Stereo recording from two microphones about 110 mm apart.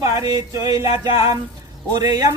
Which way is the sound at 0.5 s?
30° right (ahead or behind).